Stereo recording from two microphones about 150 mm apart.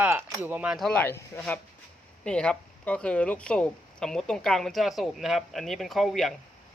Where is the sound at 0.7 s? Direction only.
5° left (ahead or behind).